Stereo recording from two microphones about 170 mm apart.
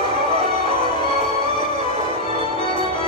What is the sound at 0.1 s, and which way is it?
Music, 35° right (ahead or behind).